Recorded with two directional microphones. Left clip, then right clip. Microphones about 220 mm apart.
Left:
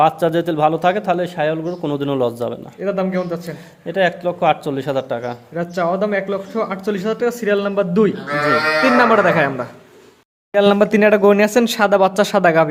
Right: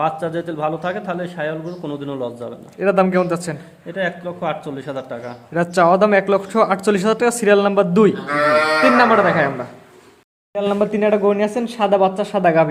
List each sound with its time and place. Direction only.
0.0 s a man's voice: 35° left (ahead or behind)
2.8 s speech: 25° right (ahead or behind)
3.8 s a man's voice: 40° left (ahead or behind)
5.5 s speech: 25° right (ahead or behind)
8.8 s speech: 5° left (ahead or behind)
10.5 s speech: 30° left (ahead or behind)